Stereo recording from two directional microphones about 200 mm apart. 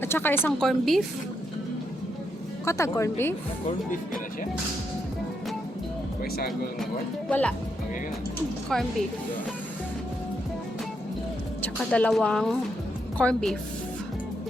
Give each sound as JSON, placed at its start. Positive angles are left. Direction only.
{"t": 0.0, "sound": "a woman's voice", "side_deg": 10}
{"t": 2.6, "sound": "speech", "side_deg": 15}
{"t": 7.3, "sound": "speech", "side_deg": 5}
{"t": 8.7, "sound": "a woman's voice", "side_deg": 0}
{"t": 11.6, "sound": "a woman's voice", "side_deg": 5}